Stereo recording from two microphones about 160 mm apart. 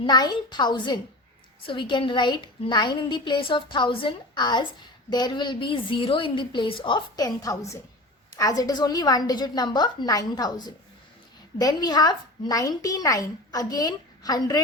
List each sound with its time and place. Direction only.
0.0 s a woman's voice: 25° left (ahead or behind)